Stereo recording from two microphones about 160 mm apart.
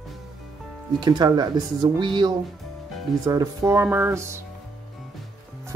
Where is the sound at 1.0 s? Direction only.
25° right (ahead or behind).